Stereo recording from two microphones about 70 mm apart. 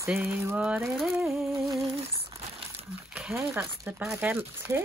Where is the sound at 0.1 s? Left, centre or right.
Centre.